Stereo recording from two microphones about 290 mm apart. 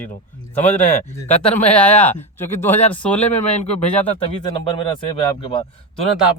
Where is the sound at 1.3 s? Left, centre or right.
Centre.